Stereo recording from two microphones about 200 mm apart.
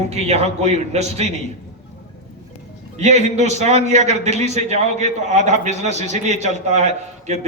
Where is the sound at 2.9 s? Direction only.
35° right (ahead or behind).